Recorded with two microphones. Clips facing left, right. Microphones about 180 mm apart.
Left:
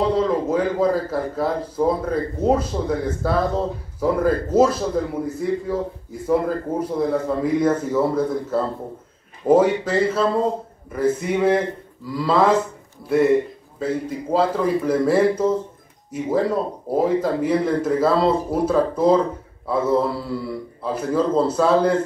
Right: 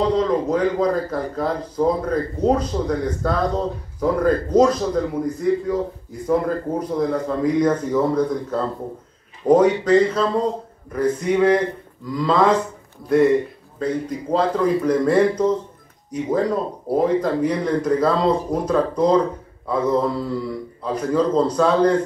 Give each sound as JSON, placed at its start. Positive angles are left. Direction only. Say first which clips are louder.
{"t": 0.0, "sound": "speech", "louder": "right 1 dB", "side_deg": 5}
{"t": 6.9, "sound": "a man's voice", "louder": "even", "side_deg": 5}
{"t": 13.7, "sound": "a man's voice", "louder": "right 1 dB", "side_deg": 5}